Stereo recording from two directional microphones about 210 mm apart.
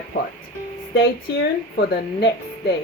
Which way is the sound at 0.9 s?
45° left (ahead or behind).